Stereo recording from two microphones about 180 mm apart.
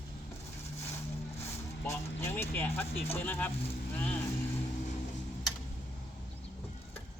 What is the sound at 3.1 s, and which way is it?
Speech, 10° left (ahead or behind).